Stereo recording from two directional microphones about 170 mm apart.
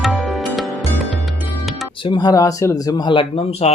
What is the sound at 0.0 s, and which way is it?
Music, centre (ahead or behind).